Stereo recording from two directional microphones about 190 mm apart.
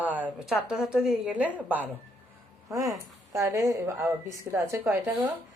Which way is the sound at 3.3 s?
15° right (ahead or behind).